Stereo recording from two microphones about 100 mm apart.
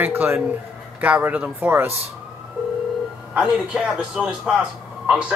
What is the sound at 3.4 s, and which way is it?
Speech, 5° right (ahead or behind).